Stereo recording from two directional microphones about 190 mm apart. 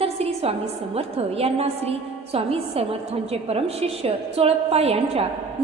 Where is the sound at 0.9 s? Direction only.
30° right (ahead or behind).